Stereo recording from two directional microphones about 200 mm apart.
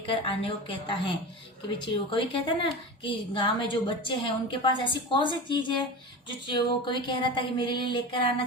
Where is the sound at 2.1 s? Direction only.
25° left (ahead or behind).